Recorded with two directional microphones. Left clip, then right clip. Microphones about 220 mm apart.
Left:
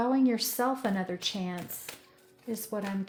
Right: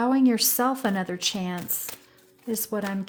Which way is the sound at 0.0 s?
40° right (ahead or behind).